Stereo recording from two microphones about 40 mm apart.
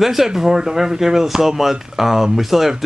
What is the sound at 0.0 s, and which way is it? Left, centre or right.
Speech, centre.